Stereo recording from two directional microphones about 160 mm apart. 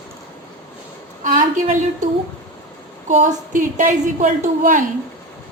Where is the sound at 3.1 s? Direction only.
50° right (ahead or behind).